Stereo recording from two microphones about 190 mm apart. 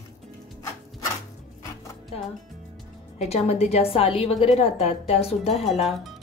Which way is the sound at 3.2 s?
35° left (ahead or behind).